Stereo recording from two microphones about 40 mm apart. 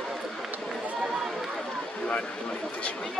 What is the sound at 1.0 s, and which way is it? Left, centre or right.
Run, centre.